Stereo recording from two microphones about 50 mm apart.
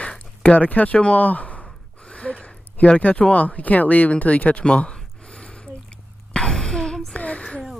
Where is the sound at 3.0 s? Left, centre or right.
Left.